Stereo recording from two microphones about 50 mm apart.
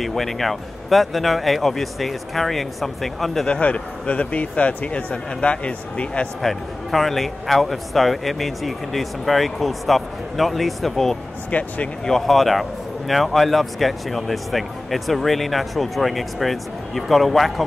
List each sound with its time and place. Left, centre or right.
0.0 s a man's voice: centre
3.6 s speech: left
6.4 s a man's voice: centre
11.5 s speech: left
12.1 s a man's voice: centre